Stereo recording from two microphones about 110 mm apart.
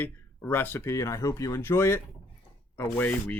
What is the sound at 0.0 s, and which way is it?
Speech, 20° left (ahead or behind).